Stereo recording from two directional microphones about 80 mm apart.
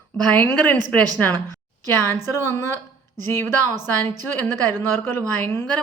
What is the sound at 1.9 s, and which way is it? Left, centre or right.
Speech, left.